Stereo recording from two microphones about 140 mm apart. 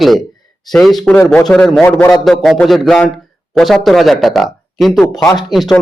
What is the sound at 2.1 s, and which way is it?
A man's voice, centre (ahead or behind).